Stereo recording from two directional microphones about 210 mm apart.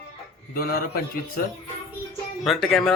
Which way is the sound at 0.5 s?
45° left (ahead or behind).